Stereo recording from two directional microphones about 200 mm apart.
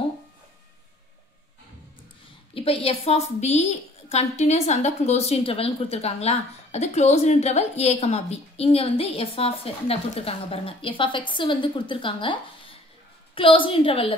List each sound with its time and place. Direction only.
2.5 s a woman's voice: 30° left (ahead or behind)